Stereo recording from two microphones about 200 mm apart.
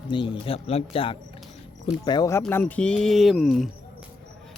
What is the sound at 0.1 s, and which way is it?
Speech, 25° left (ahead or behind).